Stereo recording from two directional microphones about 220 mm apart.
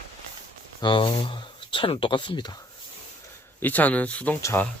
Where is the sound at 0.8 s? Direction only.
25° left (ahead or behind).